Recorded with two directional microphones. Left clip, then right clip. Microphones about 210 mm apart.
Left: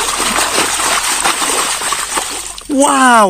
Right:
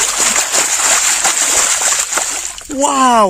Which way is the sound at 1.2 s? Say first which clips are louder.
Even; 35° right (ahead or behind).